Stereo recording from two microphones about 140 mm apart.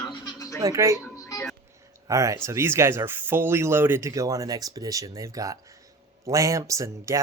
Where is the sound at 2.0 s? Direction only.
25° right (ahead or behind).